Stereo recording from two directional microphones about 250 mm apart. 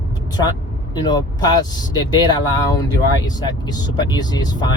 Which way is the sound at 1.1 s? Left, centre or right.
Centre.